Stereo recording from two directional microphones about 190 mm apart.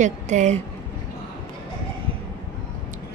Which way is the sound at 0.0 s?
40° right (ahead or behind).